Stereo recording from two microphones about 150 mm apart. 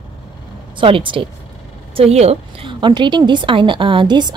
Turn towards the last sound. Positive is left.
turn(degrees=-30)  # may be behind; listen again after turning